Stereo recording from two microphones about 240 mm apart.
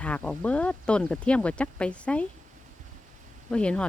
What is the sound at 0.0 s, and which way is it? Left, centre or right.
Speech, centre.